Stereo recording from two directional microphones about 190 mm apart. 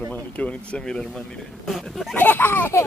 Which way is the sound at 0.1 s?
5° left (ahead or behind).